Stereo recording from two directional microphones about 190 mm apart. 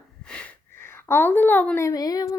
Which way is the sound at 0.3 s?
5° left (ahead or behind).